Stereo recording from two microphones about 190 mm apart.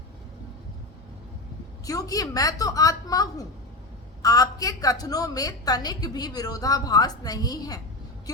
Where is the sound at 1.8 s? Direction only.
20° left (ahead or behind).